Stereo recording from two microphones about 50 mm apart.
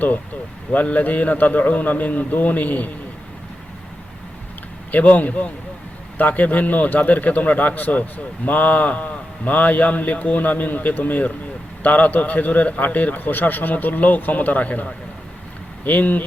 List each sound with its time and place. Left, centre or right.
0.7 s a man's voice: left
4.9 s a man's voice: left